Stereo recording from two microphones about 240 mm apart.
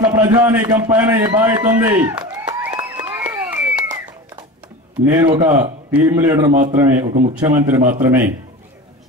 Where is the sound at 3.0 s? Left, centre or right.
Centre.